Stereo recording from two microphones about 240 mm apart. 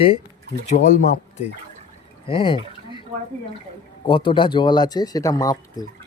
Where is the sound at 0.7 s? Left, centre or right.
Left.